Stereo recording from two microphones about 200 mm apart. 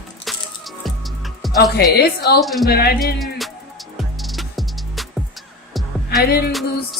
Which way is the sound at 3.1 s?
Centre (ahead or behind).